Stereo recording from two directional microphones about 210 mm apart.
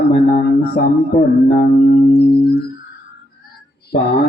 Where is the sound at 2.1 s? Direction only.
50° left (ahead or behind).